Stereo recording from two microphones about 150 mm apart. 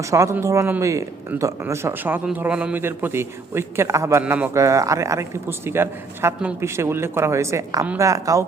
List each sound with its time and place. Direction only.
0.0 s speech: 20° right (ahead or behind)